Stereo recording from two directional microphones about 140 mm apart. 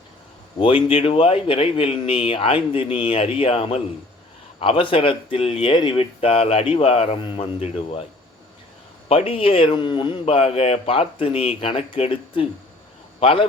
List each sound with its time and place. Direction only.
0.6 s speech: 40° left (ahead or behind)
9.0 s a man's voice: 45° left (ahead or behind)